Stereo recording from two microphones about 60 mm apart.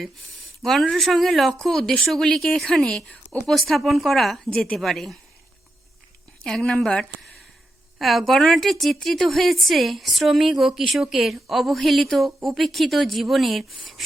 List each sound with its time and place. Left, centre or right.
0.6 s a woman's voice: centre
4.5 s a woman's voice: centre
4.8 s a woman's voice: centre
6.4 s a woman's voice: centre
7.9 s a woman's voice: centre